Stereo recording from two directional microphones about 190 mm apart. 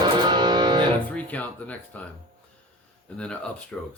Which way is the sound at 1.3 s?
10° left (ahead or behind).